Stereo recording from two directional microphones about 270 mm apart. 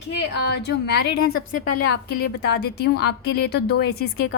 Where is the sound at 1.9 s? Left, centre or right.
Left.